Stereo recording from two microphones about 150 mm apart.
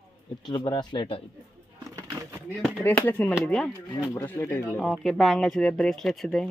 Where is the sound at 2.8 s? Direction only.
10° left (ahead or behind).